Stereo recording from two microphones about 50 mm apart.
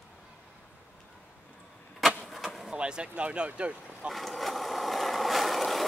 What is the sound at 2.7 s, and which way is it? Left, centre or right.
Speech, centre.